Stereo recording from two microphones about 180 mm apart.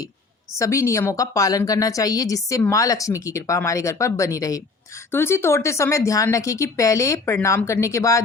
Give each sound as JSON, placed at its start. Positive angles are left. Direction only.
{"t": 0.6, "sound": "a woman's voice", "side_deg": 15}